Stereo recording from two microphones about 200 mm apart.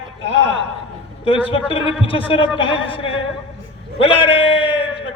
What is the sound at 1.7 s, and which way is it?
A man's voice, 25° left (ahead or behind).